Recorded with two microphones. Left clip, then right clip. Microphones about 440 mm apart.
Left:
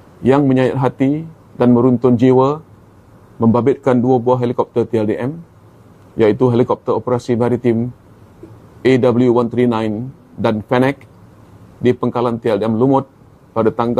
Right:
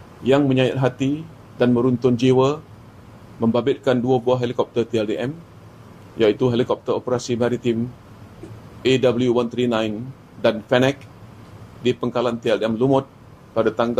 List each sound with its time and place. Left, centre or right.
0.2 s speech: left
8.8 s speech: left